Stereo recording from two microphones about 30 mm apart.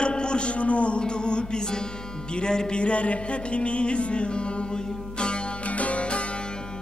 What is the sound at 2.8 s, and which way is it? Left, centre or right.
Speech, left.